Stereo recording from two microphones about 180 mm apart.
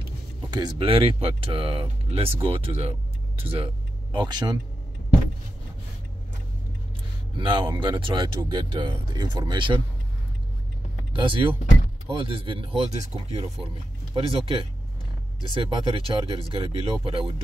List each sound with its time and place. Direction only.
0.5 s speech: 25° right (ahead or behind)
7.3 s speech: 25° right (ahead or behind)
11.1 s speech: 25° right (ahead or behind)